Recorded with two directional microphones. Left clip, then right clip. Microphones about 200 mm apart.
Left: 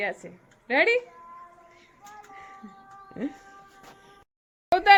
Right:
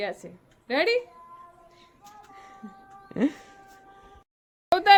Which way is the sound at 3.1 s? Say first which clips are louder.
Right 8 dB; 55° right (ahead or behind).